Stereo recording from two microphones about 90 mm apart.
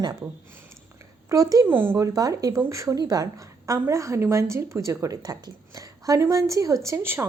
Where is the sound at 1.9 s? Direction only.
40° right (ahead or behind).